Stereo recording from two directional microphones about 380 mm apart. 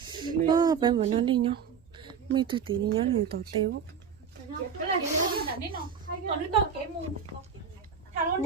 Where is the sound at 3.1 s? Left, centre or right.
Right.